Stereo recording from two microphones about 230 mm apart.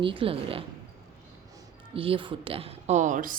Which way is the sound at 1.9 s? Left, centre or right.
Right.